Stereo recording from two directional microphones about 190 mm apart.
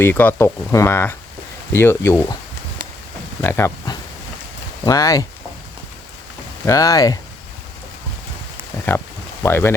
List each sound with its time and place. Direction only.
0.0 s speech: 10° left (ahead or behind)
3.4 s speech: 15° left (ahead or behind)
6.7 s speech: 20° left (ahead or behind)
8.9 s speech: 10° left (ahead or behind)